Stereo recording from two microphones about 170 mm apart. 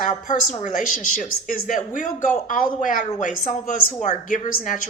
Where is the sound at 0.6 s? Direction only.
50° left (ahead or behind).